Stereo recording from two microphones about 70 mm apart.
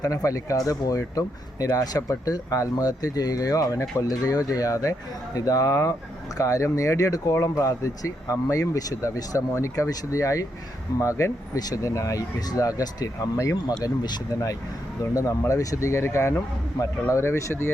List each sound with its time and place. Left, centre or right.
0.0 s speech: left
15.1 s speech: left